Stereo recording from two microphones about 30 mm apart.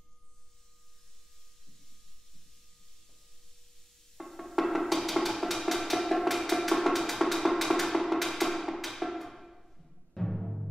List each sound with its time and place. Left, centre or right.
4.2 s music: centre